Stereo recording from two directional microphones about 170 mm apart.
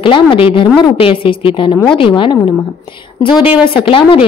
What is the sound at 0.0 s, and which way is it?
A woman's voice, 30° left (ahead or behind).